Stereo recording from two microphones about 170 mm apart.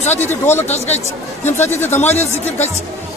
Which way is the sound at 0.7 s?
40° left (ahead or behind).